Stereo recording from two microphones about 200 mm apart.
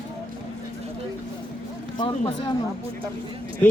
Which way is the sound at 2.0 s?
20° left (ahead or behind).